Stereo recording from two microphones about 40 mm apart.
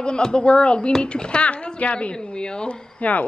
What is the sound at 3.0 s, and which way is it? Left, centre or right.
Speech, left.